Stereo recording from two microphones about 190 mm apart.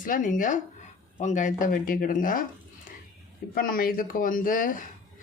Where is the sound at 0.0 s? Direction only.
45° left (ahead or behind).